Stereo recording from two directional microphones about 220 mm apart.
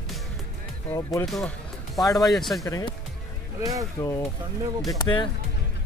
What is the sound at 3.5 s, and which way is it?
Speech, 15° right (ahead or behind).